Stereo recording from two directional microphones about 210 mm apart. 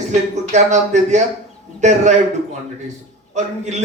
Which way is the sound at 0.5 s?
35° right (ahead or behind).